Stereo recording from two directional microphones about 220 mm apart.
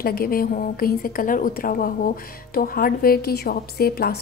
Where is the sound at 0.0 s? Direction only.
40° left (ahead or behind).